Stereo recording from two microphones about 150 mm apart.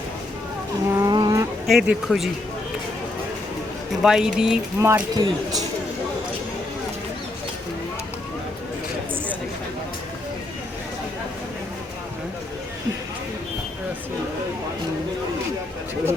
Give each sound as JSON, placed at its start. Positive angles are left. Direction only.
{"t": 0.9, "sound": "a sound", "side_deg": -20}
{"t": 1.6, "sound": "speech", "side_deg": 0}
{"t": 4.0, "sound": "speech", "side_deg": -5}
{"t": 4.8, "sound": "speech", "side_deg": -20}